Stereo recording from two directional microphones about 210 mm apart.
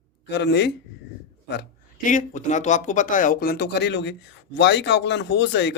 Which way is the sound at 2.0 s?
35° left (ahead or behind).